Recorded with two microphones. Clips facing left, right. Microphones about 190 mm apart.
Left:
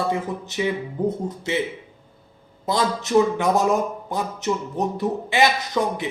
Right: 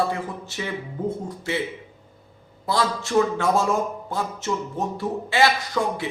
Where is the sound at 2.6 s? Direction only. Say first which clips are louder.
Left 1 dB; 20° left (ahead or behind).